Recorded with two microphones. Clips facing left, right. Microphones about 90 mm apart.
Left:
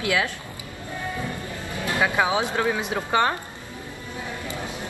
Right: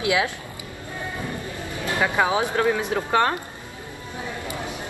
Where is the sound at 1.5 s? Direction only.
20° right (ahead or behind).